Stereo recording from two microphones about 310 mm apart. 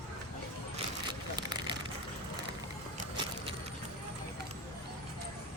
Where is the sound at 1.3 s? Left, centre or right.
Centre.